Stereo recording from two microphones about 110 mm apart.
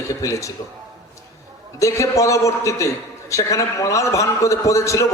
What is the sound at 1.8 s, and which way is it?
A man's voice, 30° left (ahead or behind).